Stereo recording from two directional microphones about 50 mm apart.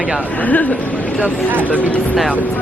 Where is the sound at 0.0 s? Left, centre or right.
Right.